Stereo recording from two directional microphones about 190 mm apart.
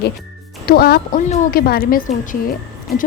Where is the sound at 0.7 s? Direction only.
55° left (ahead or behind).